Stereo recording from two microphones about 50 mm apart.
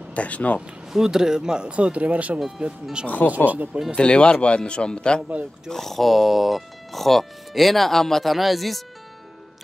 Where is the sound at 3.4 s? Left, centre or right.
Right.